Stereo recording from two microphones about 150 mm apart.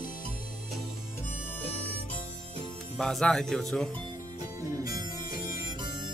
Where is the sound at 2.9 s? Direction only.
5° left (ahead or behind).